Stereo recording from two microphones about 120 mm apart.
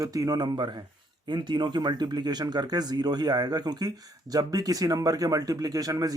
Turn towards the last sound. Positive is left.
turn(degrees=-30)  # may be behind; listen again after turning